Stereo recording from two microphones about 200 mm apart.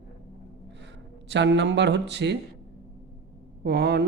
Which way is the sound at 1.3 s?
60° right (ahead or behind).